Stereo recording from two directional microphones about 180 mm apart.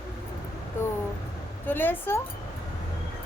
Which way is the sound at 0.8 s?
10° left (ahead or behind).